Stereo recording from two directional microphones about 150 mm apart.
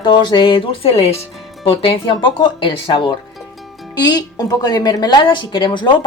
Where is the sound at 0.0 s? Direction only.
30° left (ahead or behind).